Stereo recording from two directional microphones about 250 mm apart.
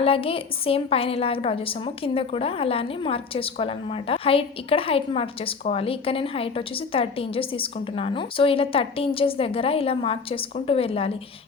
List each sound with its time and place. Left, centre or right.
0.0 s a woman's voice: left